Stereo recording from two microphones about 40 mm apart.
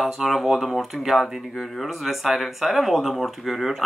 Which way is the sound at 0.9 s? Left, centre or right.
Left.